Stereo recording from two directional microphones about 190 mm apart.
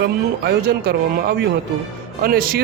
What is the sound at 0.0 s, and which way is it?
A man's voice, 55° right (ahead or behind).